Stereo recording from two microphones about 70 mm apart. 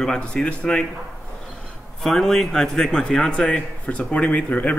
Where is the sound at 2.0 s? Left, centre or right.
Centre; by 4.7 s left.